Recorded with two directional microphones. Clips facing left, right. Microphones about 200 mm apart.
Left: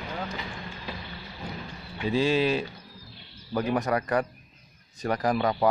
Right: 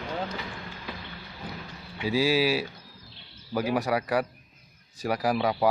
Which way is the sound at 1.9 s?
5° right (ahead or behind).